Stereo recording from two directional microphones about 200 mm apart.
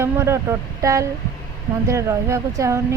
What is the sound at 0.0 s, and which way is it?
Speech, 15° right (ahead or behind).